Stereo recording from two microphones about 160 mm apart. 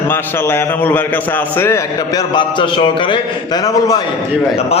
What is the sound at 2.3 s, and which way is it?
Speech, 30° left (ahead or behind).